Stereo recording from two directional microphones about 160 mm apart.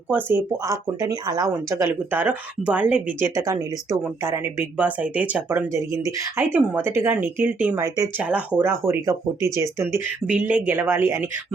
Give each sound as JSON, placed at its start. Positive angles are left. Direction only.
{"t": 0.1, "sound": "speech", "side_deg": -15}
{"t": 4.8, "sound": "speech", "side_deg": -10}